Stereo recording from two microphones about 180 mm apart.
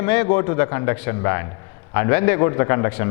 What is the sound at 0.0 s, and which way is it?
A man's voice, 15° left (ahead or behind).